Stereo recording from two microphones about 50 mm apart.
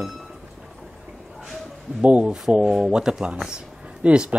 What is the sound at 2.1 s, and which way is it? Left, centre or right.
Speech, right.